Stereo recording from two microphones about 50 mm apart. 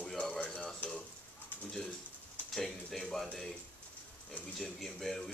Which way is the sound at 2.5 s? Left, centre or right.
Centre.